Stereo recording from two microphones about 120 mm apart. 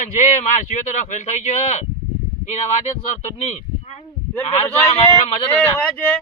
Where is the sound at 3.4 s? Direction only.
65° left (ahead or behind).